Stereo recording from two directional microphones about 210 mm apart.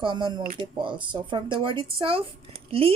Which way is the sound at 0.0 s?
20° right (ahead or behind).